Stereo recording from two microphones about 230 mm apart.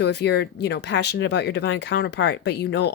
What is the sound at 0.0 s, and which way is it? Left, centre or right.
Speech, left.